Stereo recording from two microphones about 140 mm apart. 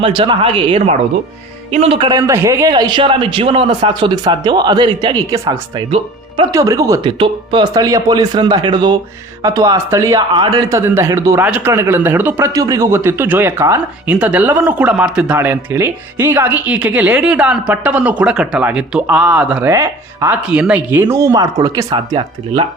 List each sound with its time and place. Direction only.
0.0 s a man's voice: 35° right (ahead or behind)
2.0 s a man's voice: 25° right (ahead or behind)
5.9 s speech: 40° right (ahead or behind)
6.5 s speech: 25° right (ahead or behind)
7.0 s a man's voice: 35° right (ahead or behind); by 19.6 s 5° right (ahead or behind)
19.6 s speech: 20° right (ahead or behind)
20.3 s speech: 10° right (ahead or behind); by 22.2 s 25° right (ahead or behind)